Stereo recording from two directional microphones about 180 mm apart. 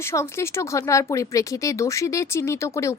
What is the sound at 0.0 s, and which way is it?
Speech, 15° left (ahead or behind).